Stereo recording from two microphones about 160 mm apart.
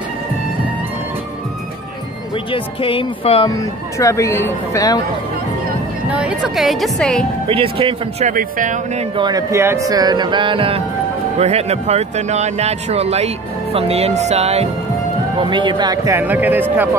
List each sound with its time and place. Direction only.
2.5 s speech: 35° left (ahead or behind)
3.4 s speech: 20° left (ahead or behind)
6.0 s speech: 5° right (ahead or behind)
7.4 s speech: 35° right (ahead or behind)
8.3 s speech: 55° right (ahead or behind)
9.1 s speech: 25° right (ahead or behind); by 14.7 s 40° right (ahead or behind)
15.4 s speech: 30° right (ahead or behind)
16.2 s speech: 10° right (ahead or behind)